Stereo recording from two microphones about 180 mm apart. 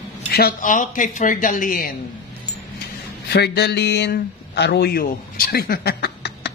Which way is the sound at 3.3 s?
65° left (ahead or behind).